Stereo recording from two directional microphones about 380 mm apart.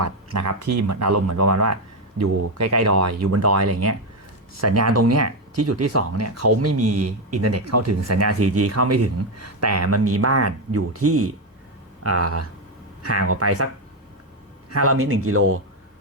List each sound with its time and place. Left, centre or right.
0.0 s speech: right
14.7 s speech: right